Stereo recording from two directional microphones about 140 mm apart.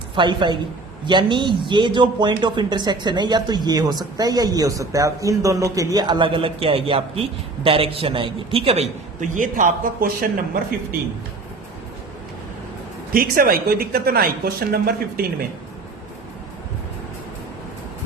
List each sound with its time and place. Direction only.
0.2 s speech: 35° right (ahead or behind)
9.3 s speech: 70° right (ahead or behind); by 10.6 s 90° right
13.1 s speech: 90° right